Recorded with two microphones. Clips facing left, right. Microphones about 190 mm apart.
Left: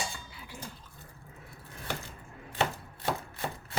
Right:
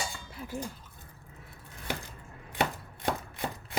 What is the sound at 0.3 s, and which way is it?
Cutlery, 45° right (ahead or behind).